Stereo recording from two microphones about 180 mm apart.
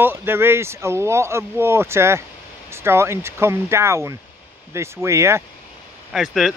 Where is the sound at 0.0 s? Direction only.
10° right (ahead or behind).